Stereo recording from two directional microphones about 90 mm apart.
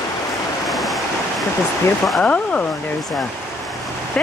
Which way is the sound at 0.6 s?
Centre (ahead or behind).